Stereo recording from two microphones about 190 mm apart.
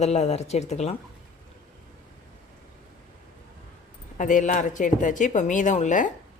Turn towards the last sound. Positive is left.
turn(degrees=40)  # may be behind; listen again after turning